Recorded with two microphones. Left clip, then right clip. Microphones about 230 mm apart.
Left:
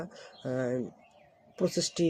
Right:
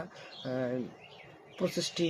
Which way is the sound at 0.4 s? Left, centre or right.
Left.